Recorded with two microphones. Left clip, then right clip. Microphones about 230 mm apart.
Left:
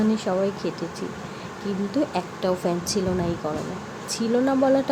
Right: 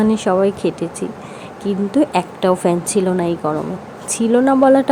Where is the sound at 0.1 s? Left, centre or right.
Right.